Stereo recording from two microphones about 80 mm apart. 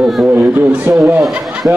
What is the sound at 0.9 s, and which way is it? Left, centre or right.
Speech, right.